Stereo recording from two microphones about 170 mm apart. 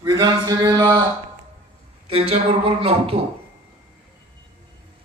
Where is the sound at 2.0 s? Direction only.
35° right (ahead or behind).